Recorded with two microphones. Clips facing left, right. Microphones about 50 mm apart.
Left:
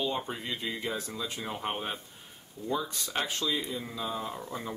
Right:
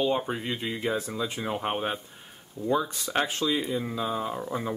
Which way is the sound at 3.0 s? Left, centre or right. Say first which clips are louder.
Right 5 dB; centre.